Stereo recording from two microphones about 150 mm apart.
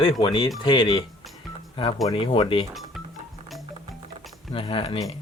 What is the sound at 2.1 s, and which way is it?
Speech, 35° left (ahead or behind).